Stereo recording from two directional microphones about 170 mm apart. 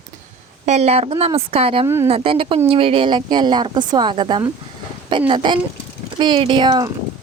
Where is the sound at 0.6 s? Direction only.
40° right (ahead or behind).